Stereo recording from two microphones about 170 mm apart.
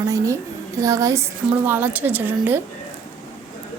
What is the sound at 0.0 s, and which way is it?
Speech, 20° right (ahead or behind).